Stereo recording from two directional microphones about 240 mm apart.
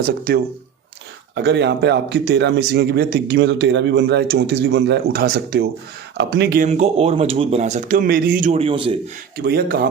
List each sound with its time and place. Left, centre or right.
1.4 s speech: right
6.7 s speech: right
9.4 s speech: right